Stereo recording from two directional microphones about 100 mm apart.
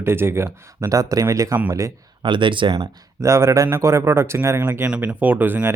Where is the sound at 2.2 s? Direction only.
55° right (ahead or behind).